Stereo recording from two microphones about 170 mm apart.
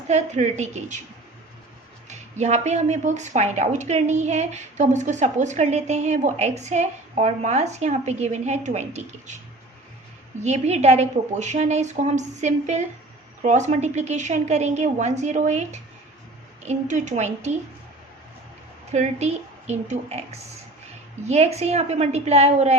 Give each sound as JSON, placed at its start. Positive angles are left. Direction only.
{"t": 0.1, "sound": "a woman's voice", "side_deg": -40}
{"t": 2.0, "sound": "speech", "side_deg": -45}
{"t": 10.4, "sound": "speech", "side_deg": -40}
{"t": 18.9, "sound": "a woman's voice", "side_deg": -40}